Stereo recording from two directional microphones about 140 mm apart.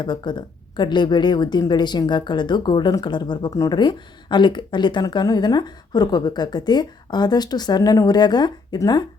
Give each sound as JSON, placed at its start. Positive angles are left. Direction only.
{"t": 0.0, "sound": "a woman's voice", "side_deg": 30}